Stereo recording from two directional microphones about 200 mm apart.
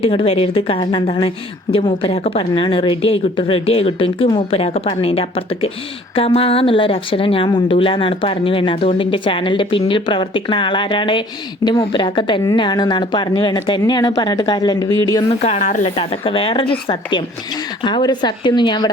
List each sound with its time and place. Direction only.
0.0 s speech: 25° left (ahead or behind)
15.3 s speech: 35° left (ahead or behind)